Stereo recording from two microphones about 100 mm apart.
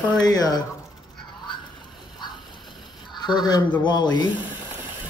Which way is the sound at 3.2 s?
45° left (ahead or behind).